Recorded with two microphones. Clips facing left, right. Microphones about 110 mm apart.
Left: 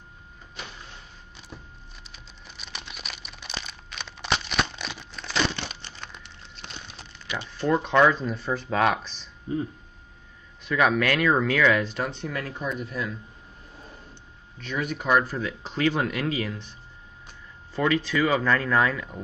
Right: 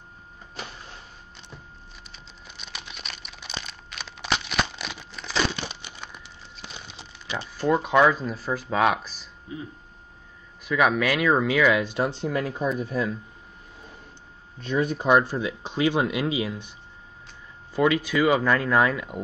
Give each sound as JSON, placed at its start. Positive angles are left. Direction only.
{"t": 2.1, "sound": "crumpling", "side_deg": 0}
{"t": 5.9, "sound": "a sound", "side_deg": -10}
{"t": 7.4, "sound": "speech", "side_deg": -10}
{"t": 10.6, "sound": "speech", "side_deg": 0}
{"t": 12.1, "sound": "speech", "side_deg": -30}
{"t": 14.6, "sound": "speech", "side_deg": -35}
{"t": 17.7, "sound": "speech", "side_deg": -10}